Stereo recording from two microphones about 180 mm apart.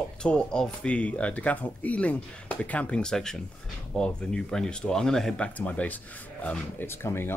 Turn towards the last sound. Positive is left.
turn(degrees=15)  # may be behind; listen again after turning